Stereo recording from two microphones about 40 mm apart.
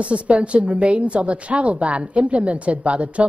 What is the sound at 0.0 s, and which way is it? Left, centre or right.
A woman's voice, right.